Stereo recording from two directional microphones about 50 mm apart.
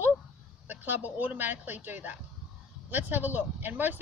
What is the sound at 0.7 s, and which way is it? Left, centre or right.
Speech, right.